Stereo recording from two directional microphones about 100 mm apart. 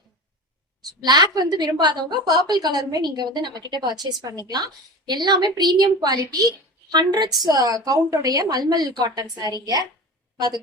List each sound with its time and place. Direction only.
1.0 s a woman's voice: 45° right (ahead or behind)
10.3 s speech: 45° right (ahead or behind)